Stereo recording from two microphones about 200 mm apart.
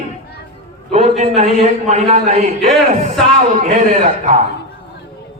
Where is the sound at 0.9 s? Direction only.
35° right (ahead or behind).